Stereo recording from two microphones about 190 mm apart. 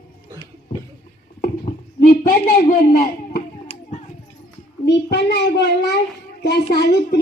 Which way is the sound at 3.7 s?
30° left (ahead or behind).